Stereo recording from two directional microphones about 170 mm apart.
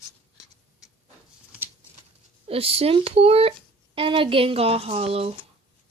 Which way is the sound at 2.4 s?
35° right (ahead or behind).